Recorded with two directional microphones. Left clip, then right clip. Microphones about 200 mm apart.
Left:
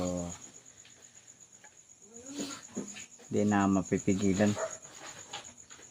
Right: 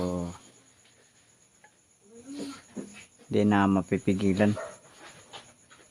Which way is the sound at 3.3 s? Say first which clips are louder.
Right 4 dB; 35° right (ahead or behind).